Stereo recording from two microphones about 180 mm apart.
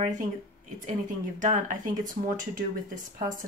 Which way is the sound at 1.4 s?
45° right (ahead or behind).